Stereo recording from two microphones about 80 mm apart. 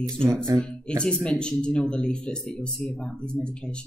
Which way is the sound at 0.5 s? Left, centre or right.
Right.